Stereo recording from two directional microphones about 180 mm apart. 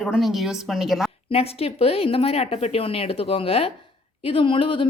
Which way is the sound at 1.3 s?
35° left (ahead or behind).